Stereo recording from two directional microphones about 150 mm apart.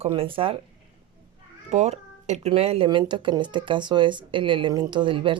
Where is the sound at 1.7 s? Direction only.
50° right (ahead or behind).